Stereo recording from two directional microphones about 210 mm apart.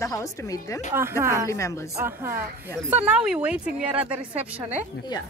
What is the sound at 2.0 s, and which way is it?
Speech, 10° right (ahead or behind).